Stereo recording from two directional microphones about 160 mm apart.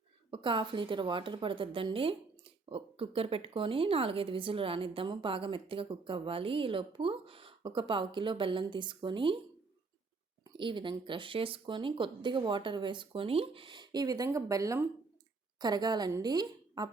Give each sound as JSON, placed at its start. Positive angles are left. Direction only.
{"t": 0.3, "sound": "speech", "side_deg": -30}
{"t": 10.6, "sound": "a woman's voice", "side_deg": -30}